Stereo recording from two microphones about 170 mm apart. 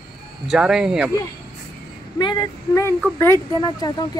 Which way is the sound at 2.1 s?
25° left (ahead or behind).